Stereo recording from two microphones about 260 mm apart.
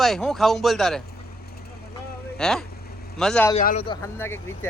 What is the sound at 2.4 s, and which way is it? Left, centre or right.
Speech, centre.